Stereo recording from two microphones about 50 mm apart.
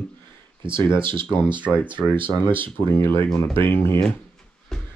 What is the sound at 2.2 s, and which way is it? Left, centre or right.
Speech, left.